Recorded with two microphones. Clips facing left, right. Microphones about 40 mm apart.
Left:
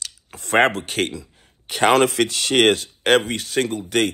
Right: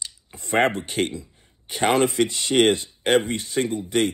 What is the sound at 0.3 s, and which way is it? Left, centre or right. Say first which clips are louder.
Speech: left 3 dB; left.